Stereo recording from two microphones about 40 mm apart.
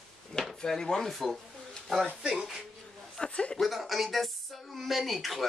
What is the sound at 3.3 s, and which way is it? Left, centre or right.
Speech, left.